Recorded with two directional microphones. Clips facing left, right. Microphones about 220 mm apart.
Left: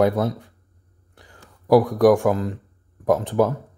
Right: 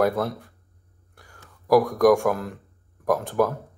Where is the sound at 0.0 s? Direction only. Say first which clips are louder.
Left 3 dB; 20° left (ahead or behind).